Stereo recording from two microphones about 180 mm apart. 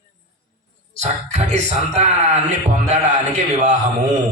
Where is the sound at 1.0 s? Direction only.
40° right (ahead or behind).